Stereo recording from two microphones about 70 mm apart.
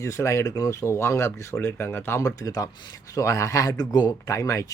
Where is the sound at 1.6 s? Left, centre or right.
Left.